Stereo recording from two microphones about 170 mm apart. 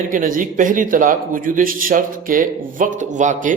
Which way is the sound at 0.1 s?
50° right (ahead or behind).